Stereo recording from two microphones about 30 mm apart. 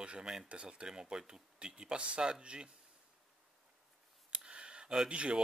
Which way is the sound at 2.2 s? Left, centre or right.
Right.